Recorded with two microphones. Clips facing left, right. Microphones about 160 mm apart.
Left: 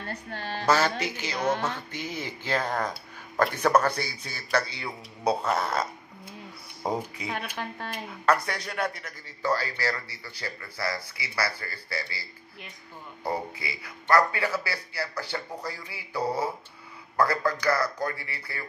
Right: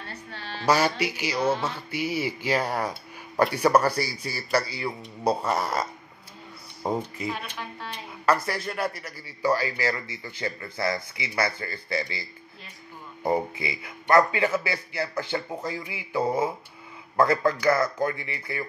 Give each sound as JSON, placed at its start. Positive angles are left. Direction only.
{"t": 0.0, "sound": "a sound", "side_deg": 50}
{"t": 0.7, "sound": "speech", "side_deg": -10}
{"t": 7.5, "sound": "speech", "side_deg": 55}
{"t": 8.5, "sound": "a man's voice", "side_deg": -5}